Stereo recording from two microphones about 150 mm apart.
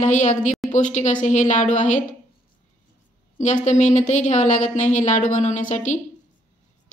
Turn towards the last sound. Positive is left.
turn(degrees=55)  # may be behind; listen again after turning